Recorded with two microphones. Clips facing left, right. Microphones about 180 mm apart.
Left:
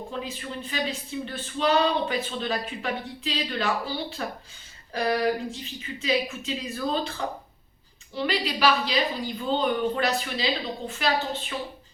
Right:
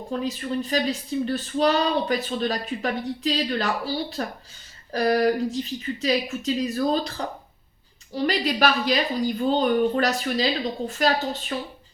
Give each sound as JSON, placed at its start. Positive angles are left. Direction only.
{"t": 0.1, "sound": "a woman's voice", "side_deg": -40}
{"t": 8.1, "sound": "a woman's voice", "side_deg": -45}